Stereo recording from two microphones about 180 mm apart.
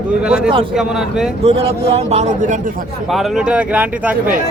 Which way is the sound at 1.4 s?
35° right (ahead or behind).